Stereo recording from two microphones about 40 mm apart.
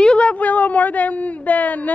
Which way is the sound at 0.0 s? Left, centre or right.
Left.